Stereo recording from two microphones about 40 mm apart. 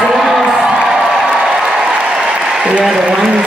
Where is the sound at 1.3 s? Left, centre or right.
Centre.